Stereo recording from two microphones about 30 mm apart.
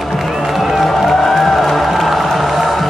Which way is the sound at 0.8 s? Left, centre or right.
Centre.